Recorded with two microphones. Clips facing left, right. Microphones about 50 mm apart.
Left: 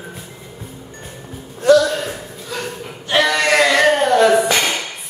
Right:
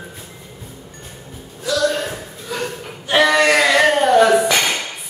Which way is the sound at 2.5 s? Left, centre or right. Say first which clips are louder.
Right 2 dB; centre.